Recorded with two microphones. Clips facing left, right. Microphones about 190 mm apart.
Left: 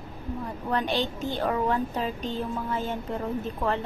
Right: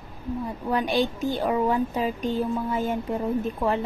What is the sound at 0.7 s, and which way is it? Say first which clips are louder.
A woman's voice: right 3 dB; 10° right (ahead or behind).